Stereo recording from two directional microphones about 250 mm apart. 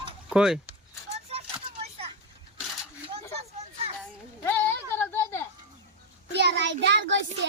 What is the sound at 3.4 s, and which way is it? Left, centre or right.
Children playing, right.